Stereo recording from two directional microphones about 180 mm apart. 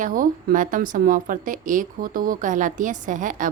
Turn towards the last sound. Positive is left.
turn(degrees=-45)  # may be behind; listen again after turning